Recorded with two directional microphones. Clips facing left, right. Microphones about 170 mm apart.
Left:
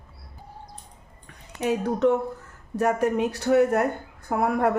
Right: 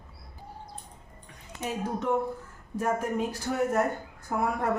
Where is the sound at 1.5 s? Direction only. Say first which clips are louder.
Left 7 dB; 70° left (ahead or behind).